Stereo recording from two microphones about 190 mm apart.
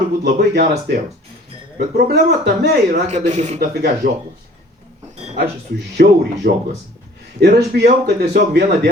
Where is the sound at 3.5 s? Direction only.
55° right (ahead or behind).